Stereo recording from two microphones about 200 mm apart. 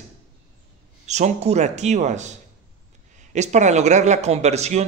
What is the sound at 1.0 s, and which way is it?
Speech, 35° right (ahead or behind).